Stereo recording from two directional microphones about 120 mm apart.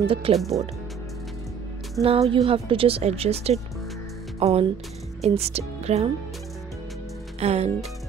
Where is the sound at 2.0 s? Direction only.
55° right (ahead or behind).